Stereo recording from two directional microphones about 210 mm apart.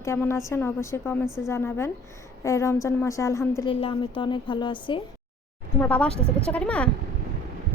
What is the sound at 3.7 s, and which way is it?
A woman's voice, 25° left (ahead or behind).